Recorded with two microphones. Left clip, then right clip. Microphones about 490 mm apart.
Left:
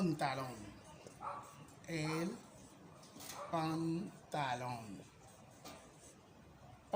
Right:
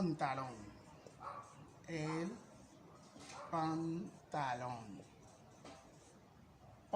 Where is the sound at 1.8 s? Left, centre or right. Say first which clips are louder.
Left 2 dB; right.